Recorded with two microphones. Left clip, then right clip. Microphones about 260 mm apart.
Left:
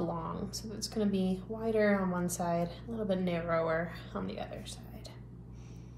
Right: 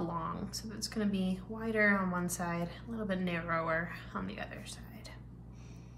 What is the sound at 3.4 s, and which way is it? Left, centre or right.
Speech, centre.